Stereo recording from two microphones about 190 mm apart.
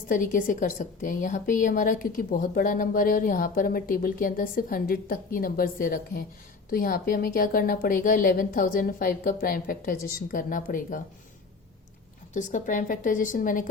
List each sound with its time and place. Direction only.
0.1 s a woman's voice: 45° left (ahead or behind)
12.3 s a woman's voice: 40° left (ahead or behind)